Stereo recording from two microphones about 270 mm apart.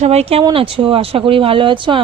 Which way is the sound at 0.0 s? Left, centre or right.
Right.